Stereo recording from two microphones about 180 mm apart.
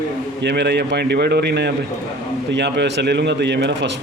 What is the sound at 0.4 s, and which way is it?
A man's voice, 70° right (ahead or behind).